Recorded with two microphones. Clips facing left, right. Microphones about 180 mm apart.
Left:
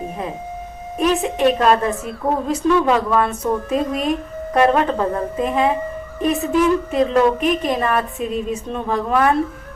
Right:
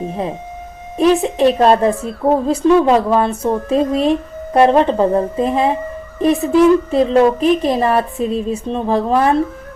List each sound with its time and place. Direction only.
0.9 s a woman's voice: 30° right (ahead or behind)